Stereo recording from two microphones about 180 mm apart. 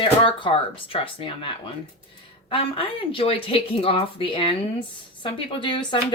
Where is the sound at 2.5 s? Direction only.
30° left (ahead or behind).